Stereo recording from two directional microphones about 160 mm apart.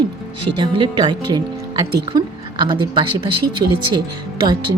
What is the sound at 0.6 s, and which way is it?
A woman's voice, 30° right (ahead or behind).